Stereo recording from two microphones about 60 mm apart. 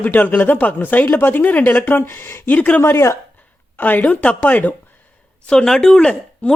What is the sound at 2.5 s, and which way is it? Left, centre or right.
Speech, left.